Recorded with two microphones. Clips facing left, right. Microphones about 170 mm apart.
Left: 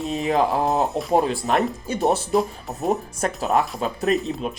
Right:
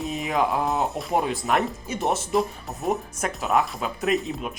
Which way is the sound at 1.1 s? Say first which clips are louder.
Left 3 dB; 30° left (ahead or behind).